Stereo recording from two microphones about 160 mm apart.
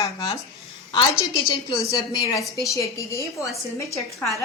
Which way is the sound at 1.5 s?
30° left (ahead or behind).